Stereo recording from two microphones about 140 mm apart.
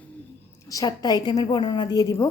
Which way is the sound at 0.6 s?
25° left (ahead or behind).